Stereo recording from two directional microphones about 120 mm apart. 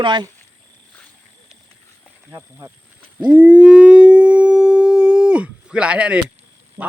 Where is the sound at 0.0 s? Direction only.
40° right (ahead or behind).